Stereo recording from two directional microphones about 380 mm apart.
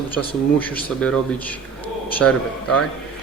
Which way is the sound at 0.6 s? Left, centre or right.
Centre.